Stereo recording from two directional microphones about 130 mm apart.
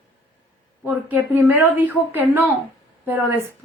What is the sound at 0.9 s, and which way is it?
A woman's voice, 15° right (ahead or behind).